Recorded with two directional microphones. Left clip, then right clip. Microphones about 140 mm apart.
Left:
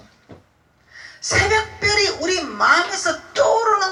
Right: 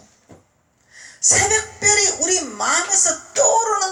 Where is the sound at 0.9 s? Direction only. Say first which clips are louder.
Right 3 dB; 45° right (ahead or behind).